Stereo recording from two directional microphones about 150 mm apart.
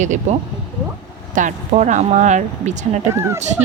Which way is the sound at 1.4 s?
55° right (ahead or behind).